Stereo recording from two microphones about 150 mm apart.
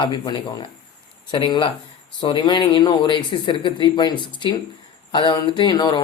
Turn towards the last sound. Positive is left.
turn(degrees=30)  # may be behind; listen again after turning